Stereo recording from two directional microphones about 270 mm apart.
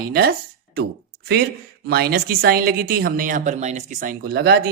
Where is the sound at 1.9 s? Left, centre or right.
Right.